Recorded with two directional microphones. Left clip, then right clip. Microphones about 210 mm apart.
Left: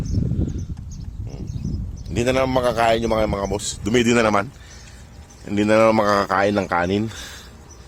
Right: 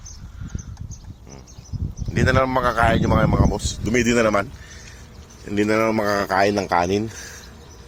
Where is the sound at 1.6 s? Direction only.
55° left (ahead or behind).